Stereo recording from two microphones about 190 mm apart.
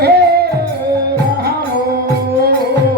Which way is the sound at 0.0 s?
55° right (ahead or behind).